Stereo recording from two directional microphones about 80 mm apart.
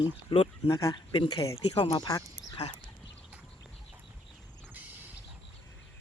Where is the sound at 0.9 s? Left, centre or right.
Left.